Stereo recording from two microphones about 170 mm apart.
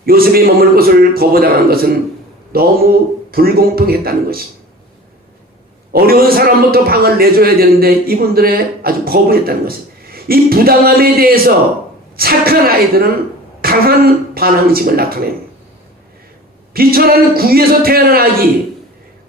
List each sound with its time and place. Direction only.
0.0 s a man's voice: 60° right (ahead or behind)
5.9 s a man's voice: 60° right (ahead or behind)
13.6 s throat clearing: 60° right (ahead or behind)
14.3 s a man's voice: 60° right (ahead or behind)
16.7 s a man's voice: 60° right (ahead or behind)